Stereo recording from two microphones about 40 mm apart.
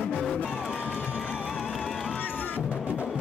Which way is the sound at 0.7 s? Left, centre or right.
Left.